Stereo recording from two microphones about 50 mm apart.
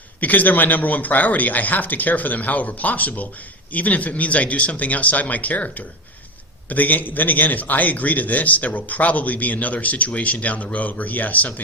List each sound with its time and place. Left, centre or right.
0.2 s a man's voice: left